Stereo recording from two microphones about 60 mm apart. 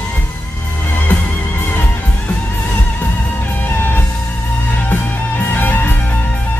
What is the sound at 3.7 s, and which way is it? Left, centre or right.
Music, left.